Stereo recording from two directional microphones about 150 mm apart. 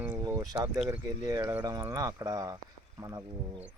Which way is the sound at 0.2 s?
20° right (ahead or behind).